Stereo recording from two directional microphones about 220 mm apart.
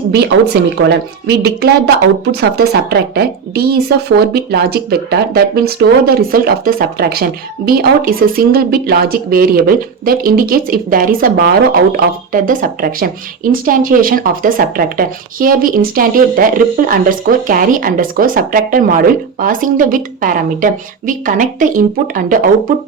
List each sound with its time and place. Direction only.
0.1 s a woman's voice: 50° right (ahead or behind)